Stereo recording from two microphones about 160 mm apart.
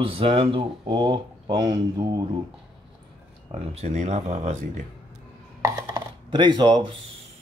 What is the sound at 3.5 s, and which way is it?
Speech, 45° right (ahead or behind).